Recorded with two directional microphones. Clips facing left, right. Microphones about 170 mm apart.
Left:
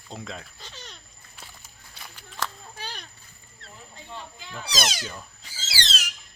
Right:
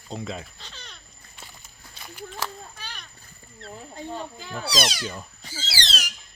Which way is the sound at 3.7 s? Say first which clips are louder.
Right 8 dB; 45° right (ahead or behind).